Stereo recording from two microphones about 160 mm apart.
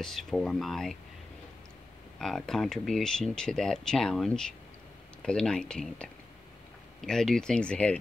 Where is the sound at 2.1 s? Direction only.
Centre (ahead or behind).